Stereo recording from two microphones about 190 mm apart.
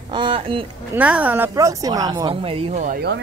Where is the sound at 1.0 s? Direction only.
5° right (ahead or behind); by 3.0 s 40° right (ahead or behind).